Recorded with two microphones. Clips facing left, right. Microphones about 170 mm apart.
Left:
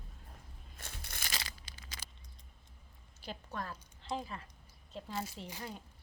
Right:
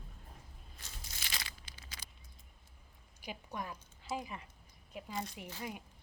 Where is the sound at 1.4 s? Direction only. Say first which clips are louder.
Left 2 dB; 35° left (ahead or behind).